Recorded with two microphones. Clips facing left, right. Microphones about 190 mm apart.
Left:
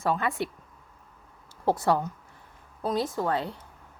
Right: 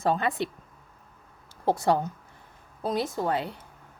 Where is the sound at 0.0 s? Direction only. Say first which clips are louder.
Right 2 dB; 20° right (ahead or behind).